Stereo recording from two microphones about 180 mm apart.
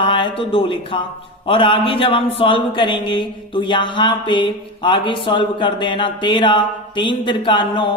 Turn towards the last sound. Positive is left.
turn(degrees=25)  # may be behind; listen again after turning